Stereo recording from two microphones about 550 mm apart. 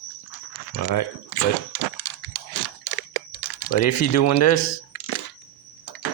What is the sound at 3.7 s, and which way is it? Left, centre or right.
Speech, left.